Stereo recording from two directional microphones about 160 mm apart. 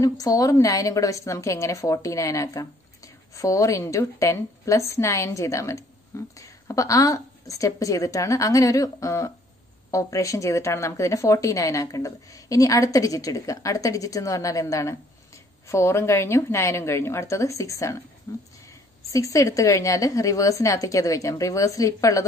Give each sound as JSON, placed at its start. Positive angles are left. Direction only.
{"t": 0.0, "sound": "a woman's voice", "side_deg": 20}